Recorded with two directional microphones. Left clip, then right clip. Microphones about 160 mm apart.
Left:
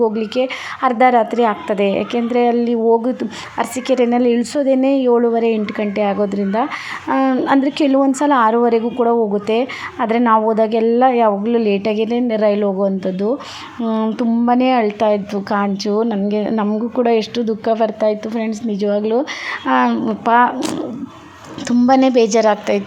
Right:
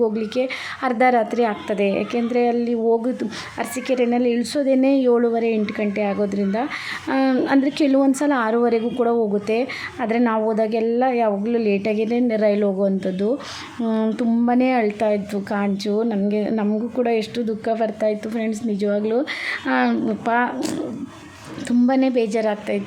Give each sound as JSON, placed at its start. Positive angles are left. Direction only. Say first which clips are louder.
{"t": 0.0, "sound": "a woman's voice", "louder": "left 4 dB", "side_deg": 0}
{"t": 13.8, "sound": "a sound", "louder": "left 3 dB", "side_deg": -5}
{"t": 14.4, "sound": "a woman's voice", "louder": "left 5 dB", "side_deg": 0}
{"t": 21.8, "sound": "a woman's voice", "louder": "left 8 dB", "side_deg": 5}